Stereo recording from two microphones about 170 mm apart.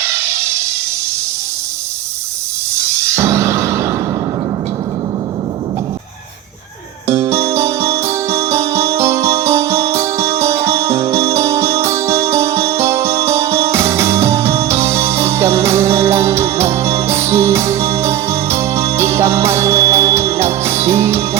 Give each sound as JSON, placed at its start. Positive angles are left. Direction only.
{"t": 0.0, "sound": "a sound", "side_deg": -15}
{"t": 3.1, "sound": "music", "side_deg": -15}
{"t": 7.1, "sound": "music", "side_deg": -15}